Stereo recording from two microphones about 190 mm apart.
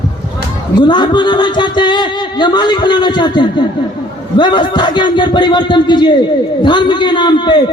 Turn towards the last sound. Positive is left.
turn(degrees=25)  # may be behind; listen again after turning